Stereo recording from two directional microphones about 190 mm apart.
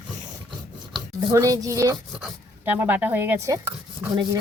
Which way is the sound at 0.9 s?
20° right (ahead or behind).